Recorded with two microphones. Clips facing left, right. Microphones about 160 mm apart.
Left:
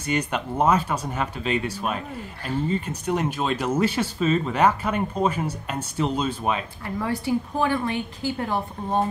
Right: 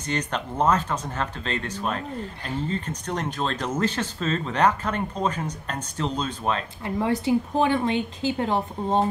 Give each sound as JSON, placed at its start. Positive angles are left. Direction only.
{"t": 0.0, "sound": "speech", "side_deg": 10}
{"t": 6.8, "sound": "a woman's voice", "side_deg": -20}